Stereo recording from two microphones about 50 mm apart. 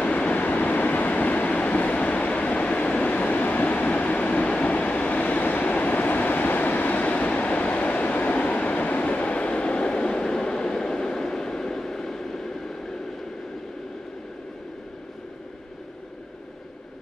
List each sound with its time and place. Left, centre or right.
0.0 s train: left; by 12.9 s centre